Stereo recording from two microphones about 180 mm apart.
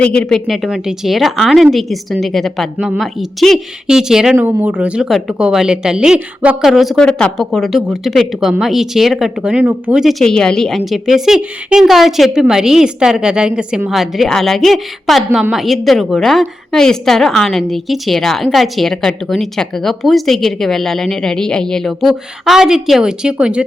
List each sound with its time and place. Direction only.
0.0 s a woman's voice: 5° left (ahead or behind)